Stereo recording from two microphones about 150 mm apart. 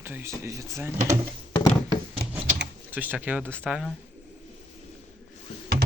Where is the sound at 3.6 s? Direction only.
5° right (ahead or behind).